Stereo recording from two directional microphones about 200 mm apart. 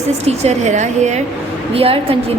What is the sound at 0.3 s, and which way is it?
A woman's voice, 35° right (ahead or behind).